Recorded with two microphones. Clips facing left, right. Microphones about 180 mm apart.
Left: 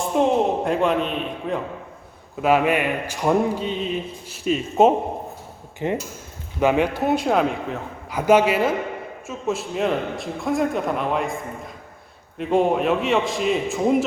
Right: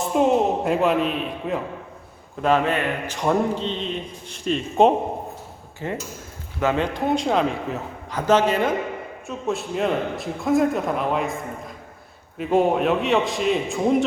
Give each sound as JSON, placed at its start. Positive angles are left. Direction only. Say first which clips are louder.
{"t": 0.2, "sound": "a man's voice", "louder": "even", "side_deg": -5}
{"t": 2.4, "sound": "a man's voice", "louder": "left 2 dB", "side_deg": 10}
{"t": 5.8, "sound": "a man's voice", "louder": "left 4 dB", "side_deg": 20}